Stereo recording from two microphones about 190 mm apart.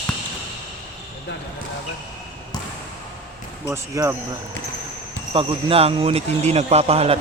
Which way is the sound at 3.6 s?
15° right (ahead or behind).